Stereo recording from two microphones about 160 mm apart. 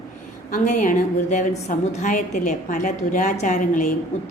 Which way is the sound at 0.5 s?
50° left (ahead or behind).